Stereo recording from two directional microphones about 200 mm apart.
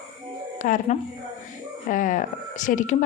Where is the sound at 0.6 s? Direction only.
40° left (ahead or behind).